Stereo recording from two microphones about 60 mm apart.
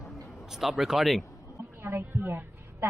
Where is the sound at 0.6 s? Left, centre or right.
Centre.